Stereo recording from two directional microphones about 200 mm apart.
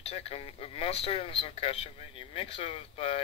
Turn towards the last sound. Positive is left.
turn(degrees=30)  # may be behind; listen again after turning